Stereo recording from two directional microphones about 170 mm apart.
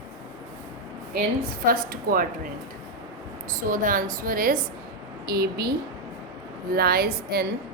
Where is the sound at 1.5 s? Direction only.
60° right (ahead or behind).